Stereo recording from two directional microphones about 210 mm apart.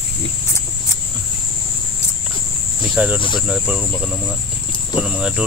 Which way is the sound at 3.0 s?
5° right (ahead or behind).